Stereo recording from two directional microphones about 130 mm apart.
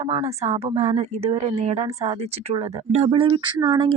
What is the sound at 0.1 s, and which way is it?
Speech, 60° right (ahead or behind).